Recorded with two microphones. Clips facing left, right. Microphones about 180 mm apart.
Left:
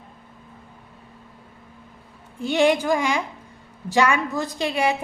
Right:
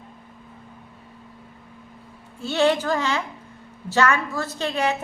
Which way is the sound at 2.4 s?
15° left (ahead or behind).